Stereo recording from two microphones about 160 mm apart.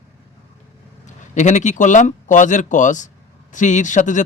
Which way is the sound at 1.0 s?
50° left (ahead or behind).